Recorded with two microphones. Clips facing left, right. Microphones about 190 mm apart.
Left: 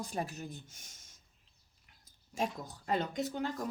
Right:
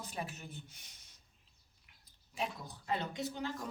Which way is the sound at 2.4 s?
45° left (ahead or behind).